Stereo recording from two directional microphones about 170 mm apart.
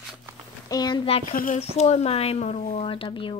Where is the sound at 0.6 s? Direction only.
25° left (ahead or behind).